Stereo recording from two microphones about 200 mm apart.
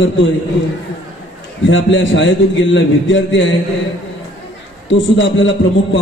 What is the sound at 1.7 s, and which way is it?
A man's voice, 70° left (ahead or behind).